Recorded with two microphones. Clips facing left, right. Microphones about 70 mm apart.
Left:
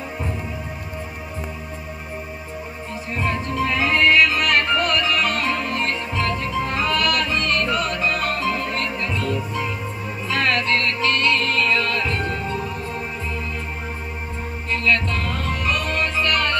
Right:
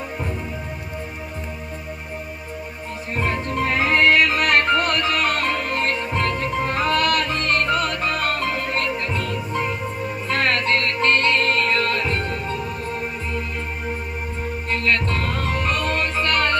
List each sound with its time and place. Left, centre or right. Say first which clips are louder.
3.2 s music: even; right
14.7 s music: left 1 dB; right